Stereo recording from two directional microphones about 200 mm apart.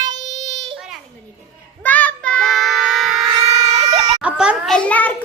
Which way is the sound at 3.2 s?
20° right (ahead or behind).